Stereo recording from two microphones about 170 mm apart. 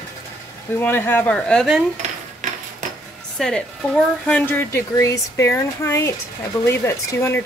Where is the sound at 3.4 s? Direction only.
5° left (ahead or behind).